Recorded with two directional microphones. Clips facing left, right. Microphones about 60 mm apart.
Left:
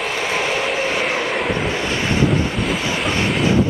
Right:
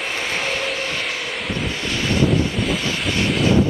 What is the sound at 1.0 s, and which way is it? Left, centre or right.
Vehicle, left.